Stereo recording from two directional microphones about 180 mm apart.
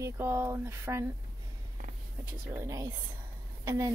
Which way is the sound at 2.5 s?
15° right (ahead or behind).